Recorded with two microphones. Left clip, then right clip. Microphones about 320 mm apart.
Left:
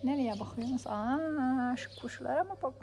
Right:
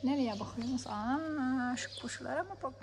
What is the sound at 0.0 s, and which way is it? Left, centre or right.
Speech, centre.